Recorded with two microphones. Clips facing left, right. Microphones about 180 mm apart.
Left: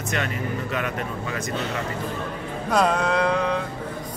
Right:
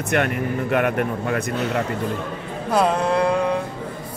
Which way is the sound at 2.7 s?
5° right (ahead or behind).